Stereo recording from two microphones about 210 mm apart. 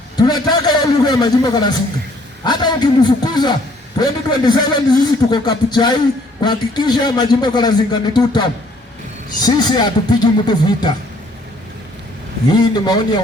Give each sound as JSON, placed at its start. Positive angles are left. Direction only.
{"t": 0.2, "sound": "a man's voice", "side_deg": 20}
{"t": 12.5, "sound": "a man's voice", "side_deg": 20}